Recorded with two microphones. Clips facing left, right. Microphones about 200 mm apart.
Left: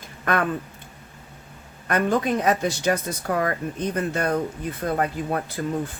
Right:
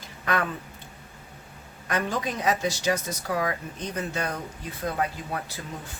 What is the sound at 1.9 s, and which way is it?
Speech, 55° left (ahead or behind).